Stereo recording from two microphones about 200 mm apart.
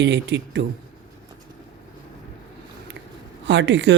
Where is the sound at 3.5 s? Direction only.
60° right (ahead or behind).